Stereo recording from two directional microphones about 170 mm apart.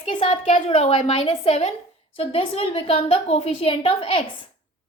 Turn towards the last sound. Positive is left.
turn(degrees=30)  # may be behind; listen again after turning